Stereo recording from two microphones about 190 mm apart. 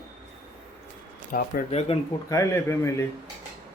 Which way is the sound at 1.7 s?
35° left (ahead or behind).